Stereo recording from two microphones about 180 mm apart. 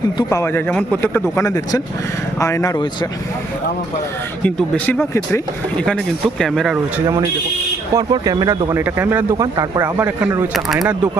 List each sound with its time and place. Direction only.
0.2 s a man's voice: 20° left (ahead or behind)
1.4 s a man's voice: 20° left (ahead or behind)
4.4 s speech: 5° left (ahead or behind)
7.9 s a man's voice: 20° right (ahead or behind)
10.5 s speech: centre (ahead or behind)